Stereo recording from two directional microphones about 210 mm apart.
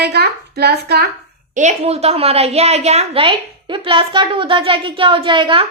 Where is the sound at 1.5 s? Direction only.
30° right (ahead or behind).